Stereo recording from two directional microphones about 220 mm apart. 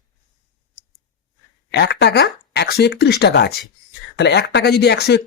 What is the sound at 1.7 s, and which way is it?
Speech, 50° left (ahead or behind).